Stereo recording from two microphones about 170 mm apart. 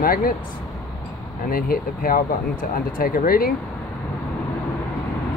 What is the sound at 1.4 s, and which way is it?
Speech, 55° left (ahead or behind).